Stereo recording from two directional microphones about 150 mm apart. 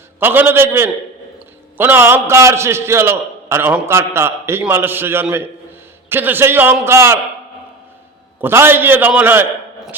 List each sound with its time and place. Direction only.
0.2 s a man's voice: 15° right (ahead or behind)
8.4 s a man's voice: 15° right (ahead or behind)